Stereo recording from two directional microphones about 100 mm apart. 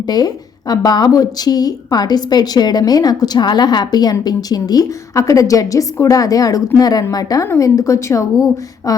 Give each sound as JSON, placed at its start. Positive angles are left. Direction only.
{"t": 0.0, "sound": "a woman's voice", "side_deg": 40}